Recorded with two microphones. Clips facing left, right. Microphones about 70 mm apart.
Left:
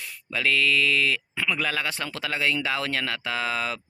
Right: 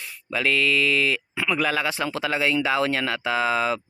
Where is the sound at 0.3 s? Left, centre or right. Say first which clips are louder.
Right 1 dB; centre.